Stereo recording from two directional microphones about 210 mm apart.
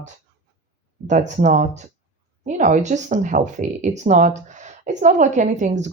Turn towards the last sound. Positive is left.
turn(degrees=-35)  # may be behind; listen again after turning